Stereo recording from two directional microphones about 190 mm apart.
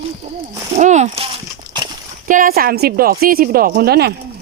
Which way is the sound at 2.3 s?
45° right (ahead or behind).